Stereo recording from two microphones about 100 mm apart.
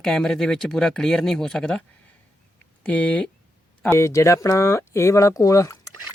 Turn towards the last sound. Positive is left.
turn(degrees=35)  # may be behind; listen again after turning